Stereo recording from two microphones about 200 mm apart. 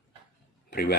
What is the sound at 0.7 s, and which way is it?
Speech, 50° left (ahead or behind).